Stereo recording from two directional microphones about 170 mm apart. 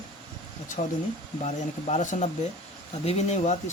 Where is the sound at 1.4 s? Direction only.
40° left (ahead or behind).